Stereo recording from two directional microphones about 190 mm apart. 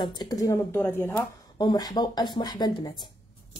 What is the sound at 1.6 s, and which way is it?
Speech, 20° left (ahead or behind).